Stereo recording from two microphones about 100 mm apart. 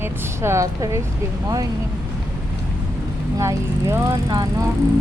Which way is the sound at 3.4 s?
30° right (ahead or behind).